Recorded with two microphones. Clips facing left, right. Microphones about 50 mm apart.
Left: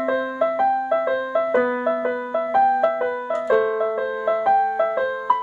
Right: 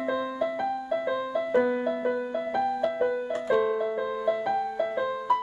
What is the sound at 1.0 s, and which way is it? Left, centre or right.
Music, left.